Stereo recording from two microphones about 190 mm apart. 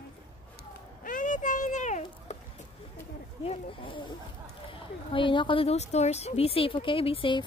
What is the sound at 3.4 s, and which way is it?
Speech, 30° left (ahead or behind).